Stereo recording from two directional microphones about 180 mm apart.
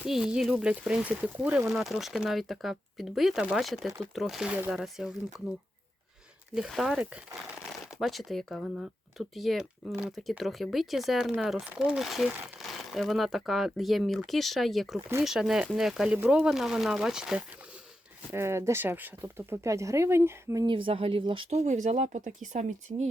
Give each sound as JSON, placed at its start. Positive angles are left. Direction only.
{"t": 0.1, "sound": "speech", "side_deg": -5}
{"t": 18.3, "sound": "speech", "side_deg": -15}